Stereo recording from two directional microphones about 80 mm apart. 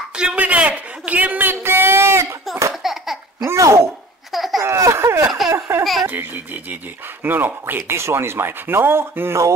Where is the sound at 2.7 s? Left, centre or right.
Centre.